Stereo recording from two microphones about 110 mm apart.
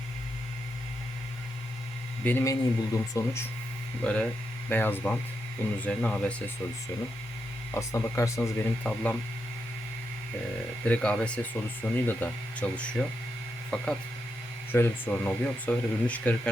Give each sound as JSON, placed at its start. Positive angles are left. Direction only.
{"t": 2.4, "sound": "speech", "side_deg": 30}
{"t": 4.0, "sound": "speech", "side_deg": 10}
{"t": 7.7, "sound": "speech", "side_deg": 25}
{"t": 10.8, "sound": "speech", "side_deg": 10}
{"t": 14.7, "sound": "speech", "side_deg": 20}